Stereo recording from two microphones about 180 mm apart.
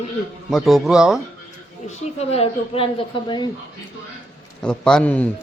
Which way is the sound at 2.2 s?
35° left (ahead or behind).